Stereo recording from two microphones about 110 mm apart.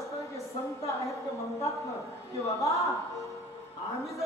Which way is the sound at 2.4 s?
30° left (ahead or behind).